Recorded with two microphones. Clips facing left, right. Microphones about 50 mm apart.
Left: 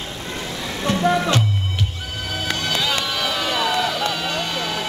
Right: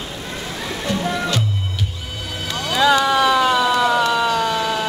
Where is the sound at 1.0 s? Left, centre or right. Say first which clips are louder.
Left 8 dB; centre.